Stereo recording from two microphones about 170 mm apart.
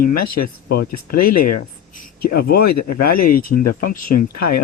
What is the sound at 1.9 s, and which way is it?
Speech, 60° left (ahead or behind).